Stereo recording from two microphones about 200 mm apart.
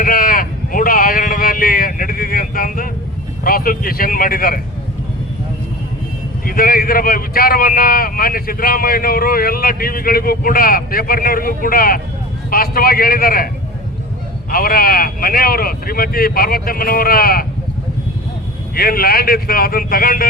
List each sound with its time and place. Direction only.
0.0 s a sound: 45° left (ahead or behind)
3.4 s a man's voice: 45° left (ahead or behind)
6.4 s a man's voice: 45° left (ahead or behind)
14.5 s a man's voice: 45° left (ahead or behind)
18.7 s a man's voice: 45° left (ahead or behind)